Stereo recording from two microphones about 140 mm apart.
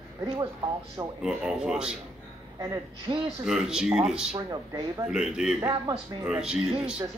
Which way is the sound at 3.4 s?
5° right (ahead or behind).